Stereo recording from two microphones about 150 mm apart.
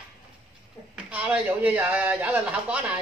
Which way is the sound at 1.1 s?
10° right (ahead or behind).